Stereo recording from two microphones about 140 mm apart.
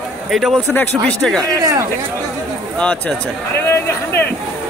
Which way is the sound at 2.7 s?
10° left (ahead or behind).